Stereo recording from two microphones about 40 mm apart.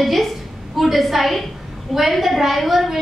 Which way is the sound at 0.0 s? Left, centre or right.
Centre.